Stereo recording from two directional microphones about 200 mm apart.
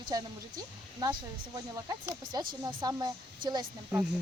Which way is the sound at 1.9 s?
20° right (ahead or behind).